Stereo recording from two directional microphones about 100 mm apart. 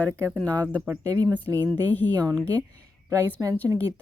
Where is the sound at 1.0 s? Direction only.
40° right (ahead or behind).